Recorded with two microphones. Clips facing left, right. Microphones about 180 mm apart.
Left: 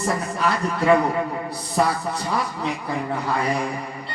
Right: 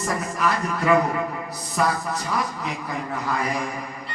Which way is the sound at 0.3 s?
30° left (ahead or behind).